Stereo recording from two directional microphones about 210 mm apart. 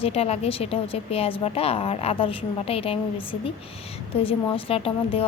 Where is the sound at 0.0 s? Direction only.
30° left (ahead or behind).